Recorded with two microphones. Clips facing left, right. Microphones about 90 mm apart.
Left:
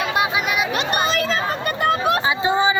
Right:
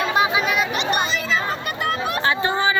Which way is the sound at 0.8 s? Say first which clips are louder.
Left 1 dB; 45° left (ahead or behind).